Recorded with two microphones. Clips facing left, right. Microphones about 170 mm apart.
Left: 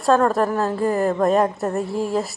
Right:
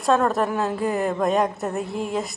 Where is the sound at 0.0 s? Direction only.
Centre (ahead or behind).